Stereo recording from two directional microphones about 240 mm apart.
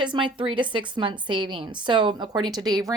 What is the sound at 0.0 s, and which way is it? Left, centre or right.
A woman's voice, centre.